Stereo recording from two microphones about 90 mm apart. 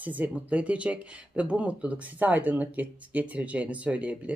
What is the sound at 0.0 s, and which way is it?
Speech, 20° right (ahead or behind).